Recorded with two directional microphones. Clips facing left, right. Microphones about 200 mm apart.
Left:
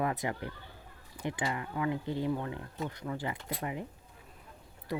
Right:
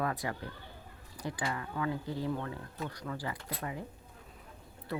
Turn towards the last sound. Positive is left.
turn(degrees=15)  # may be behind; listen again after turning